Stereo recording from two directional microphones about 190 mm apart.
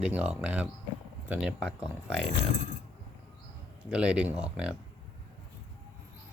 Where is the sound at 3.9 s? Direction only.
5° right (ahead or behind).